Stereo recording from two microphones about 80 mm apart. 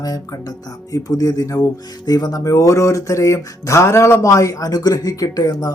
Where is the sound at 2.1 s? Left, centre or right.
Left.